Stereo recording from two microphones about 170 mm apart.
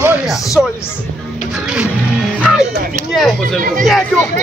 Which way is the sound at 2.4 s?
5° right (ahead or behind).